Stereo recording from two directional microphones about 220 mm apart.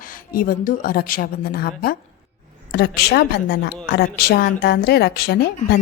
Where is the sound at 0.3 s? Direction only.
40° left (ahead or behind).